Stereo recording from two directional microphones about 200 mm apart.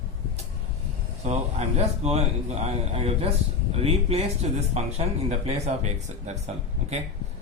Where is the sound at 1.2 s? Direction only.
35° right (ahead or behind).